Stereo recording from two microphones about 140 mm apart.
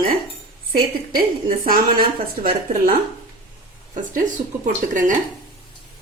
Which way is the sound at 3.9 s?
65° right (ahead or behind).